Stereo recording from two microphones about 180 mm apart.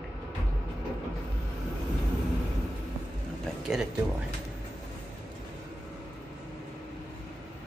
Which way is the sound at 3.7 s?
5° right (ahead or behind).